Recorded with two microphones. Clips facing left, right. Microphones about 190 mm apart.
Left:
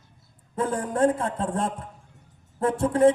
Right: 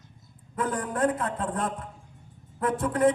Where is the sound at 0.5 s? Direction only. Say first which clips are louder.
Left 3 dB; 25° left (ahead or behind).